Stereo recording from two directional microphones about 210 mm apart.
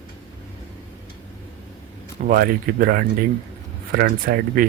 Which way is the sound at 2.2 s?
40° right (ahead or behind).